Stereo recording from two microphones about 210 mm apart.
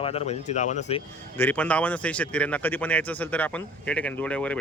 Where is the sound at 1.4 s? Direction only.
5° left (ahead or behind).